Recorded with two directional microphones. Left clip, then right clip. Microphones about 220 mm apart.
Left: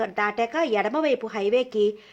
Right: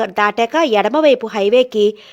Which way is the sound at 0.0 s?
40° right (ahead or behind).